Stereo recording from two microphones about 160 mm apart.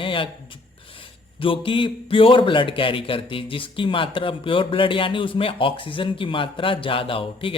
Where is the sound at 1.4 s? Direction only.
35° left (ahead or behind).